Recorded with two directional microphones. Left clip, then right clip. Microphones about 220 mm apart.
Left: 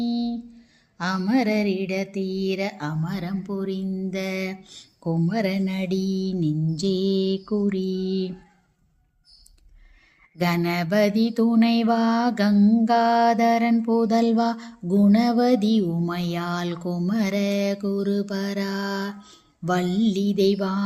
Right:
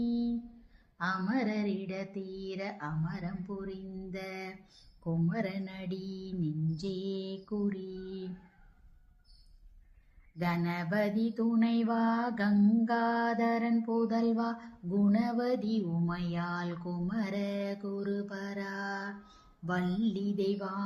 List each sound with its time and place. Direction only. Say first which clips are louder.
0.0 s a sound: left 7 dB; 35° left (ahead or behind)
0.9 s mantra: left 9 dB; 35° left (ahead or behind)
10.3 s mantra: left 11 dB; 40° left (ahead or behind)